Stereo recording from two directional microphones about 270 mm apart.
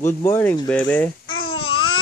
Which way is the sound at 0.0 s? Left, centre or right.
Centre.